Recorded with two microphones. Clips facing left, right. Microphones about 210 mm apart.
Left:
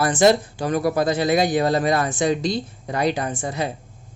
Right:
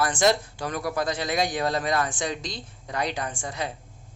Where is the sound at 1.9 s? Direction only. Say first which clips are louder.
Left 5 dB; 30° left (ahead or behind).